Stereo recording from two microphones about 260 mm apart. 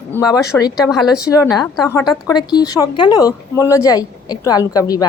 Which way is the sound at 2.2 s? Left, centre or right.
Centre.